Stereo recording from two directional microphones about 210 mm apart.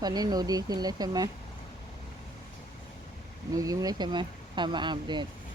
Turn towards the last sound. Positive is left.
turn(degrees=-20)  # may be behind; listen again after turning